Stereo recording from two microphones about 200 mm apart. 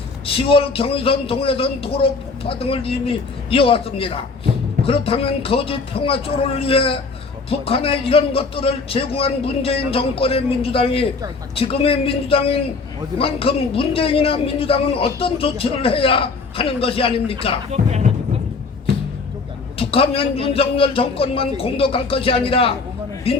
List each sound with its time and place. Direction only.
0.3 s a man's voice: 25° left (ahead or behind)
17.7 s speech: 35° right (ahead or behind)
19.8 s a man's voice: 30° left (ahead or behind)